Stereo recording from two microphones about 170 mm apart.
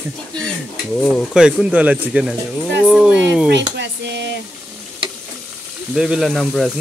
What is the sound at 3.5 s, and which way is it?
Speech, 90° right.